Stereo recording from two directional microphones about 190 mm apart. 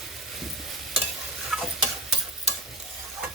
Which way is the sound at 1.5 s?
5° right (ahead or behind).